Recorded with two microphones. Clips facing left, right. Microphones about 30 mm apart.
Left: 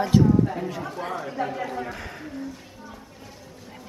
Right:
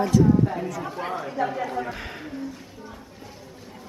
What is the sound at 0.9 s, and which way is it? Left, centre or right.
Speech, centre.